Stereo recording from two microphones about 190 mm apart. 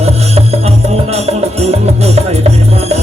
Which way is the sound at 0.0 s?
35° right (ahead or behind).